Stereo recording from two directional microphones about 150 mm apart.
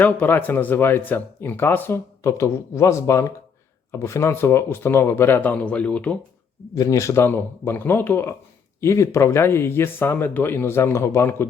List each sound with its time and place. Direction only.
0.0 s speech: 10° left (ahead or behind)
6.7 s speech: 20° left (ahead or behind)